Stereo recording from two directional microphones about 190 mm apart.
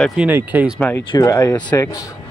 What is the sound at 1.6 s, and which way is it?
Speech, 5° left (ahead or behind).